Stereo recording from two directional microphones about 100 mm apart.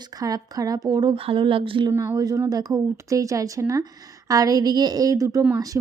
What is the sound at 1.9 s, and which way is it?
A woman's voice, 35° right (ahead or behind).